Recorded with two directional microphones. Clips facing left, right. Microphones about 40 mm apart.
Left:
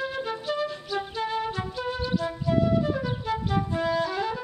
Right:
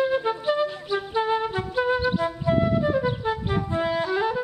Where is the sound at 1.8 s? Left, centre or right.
Right.